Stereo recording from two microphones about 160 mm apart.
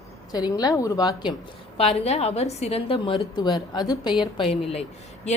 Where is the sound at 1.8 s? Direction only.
40° left (ahead or behind).